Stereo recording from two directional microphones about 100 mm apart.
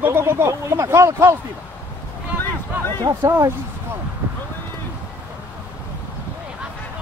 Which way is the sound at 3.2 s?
25° right (ahead or behind).